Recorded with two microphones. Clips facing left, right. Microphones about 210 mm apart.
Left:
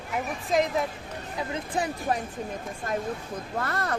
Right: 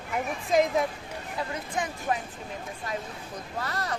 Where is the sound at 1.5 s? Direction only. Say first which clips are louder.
Left 6 dB; 35° left (ahead or behind).